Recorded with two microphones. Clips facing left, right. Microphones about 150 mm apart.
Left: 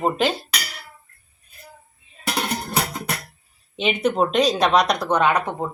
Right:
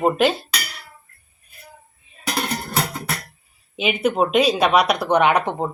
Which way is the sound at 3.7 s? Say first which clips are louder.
Right 1 dB; 5° right (ahead or behind).